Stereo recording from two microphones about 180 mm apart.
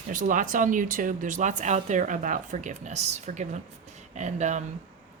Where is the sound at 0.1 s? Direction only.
45° right (ahead or behind).